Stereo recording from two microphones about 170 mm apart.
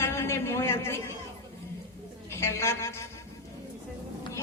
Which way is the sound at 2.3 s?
15° left (ahead or behind).